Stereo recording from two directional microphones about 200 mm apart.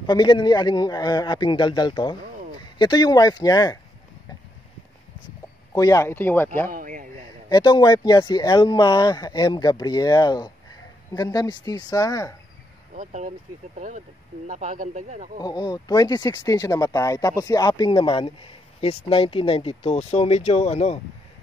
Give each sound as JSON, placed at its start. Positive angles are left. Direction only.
{"t": 0.0, "sound": "speech", "side_deg": 20}
{"t": 5.7, "sound": "speech", "side_deg": 15}
{"t": 6.7, "sound": "speech", "side_deg": -40}
{"t": 7.4, "sound": "speech", "side_deg": 20}
{"t": 12.9, "sound": "speech", "side_deg": -40}
{"t": 15.4, "sound": "speech", "side_deg": 20}